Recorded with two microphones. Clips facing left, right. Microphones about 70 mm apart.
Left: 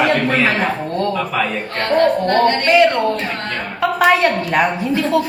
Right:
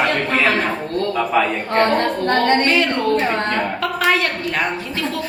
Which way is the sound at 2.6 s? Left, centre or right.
Centre.